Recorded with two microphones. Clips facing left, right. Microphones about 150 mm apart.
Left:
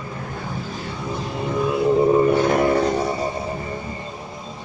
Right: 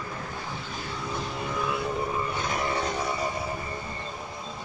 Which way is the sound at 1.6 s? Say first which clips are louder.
Left 12 dB; 25° left (ahead or behind).